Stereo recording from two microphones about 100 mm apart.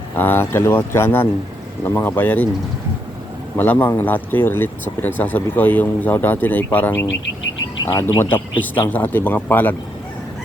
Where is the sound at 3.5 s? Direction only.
20° left (ahead or behind).